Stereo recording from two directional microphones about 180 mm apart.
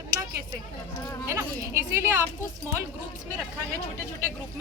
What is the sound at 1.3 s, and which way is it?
Speech, 15° right (ahead or behind).